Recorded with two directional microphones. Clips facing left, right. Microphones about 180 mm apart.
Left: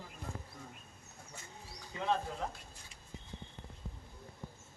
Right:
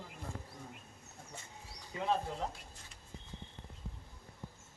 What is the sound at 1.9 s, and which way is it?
Speech, 5° right (ahead or behind).